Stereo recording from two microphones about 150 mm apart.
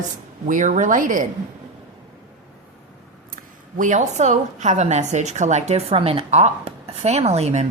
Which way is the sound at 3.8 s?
55° right (ahead or behind).